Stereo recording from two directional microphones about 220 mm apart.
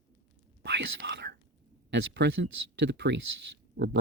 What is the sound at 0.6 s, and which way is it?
Speech, 50° right (ahead or behind).